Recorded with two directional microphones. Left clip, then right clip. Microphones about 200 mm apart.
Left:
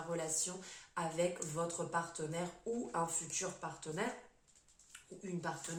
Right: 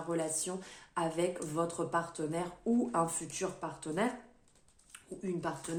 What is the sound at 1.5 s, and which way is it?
Speech, 50° right (ahead or behind).